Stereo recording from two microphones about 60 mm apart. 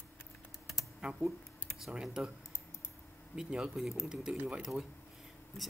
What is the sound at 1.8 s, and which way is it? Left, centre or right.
Speech, centre.